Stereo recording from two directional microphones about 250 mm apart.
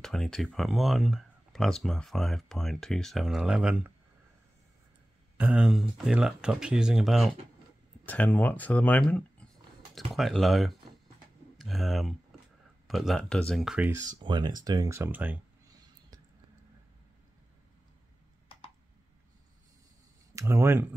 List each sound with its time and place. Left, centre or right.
0.0 s speech: centre
5.4 s speech: centre
14.2 s speech: centre
20.3 s speech: centre